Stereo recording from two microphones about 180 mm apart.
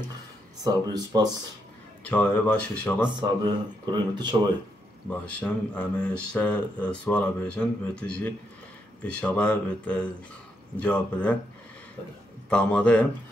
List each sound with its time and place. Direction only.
0.7 s speech: 20° right (ahead or behind)
2.0 s speech: 10° left (ahead or behind)
3.1 s speech: 25° right (ahead or behind)
5.4 s speech: 10° left (ahead or behind)
12.4 s speech: 5° left (ahead or behind)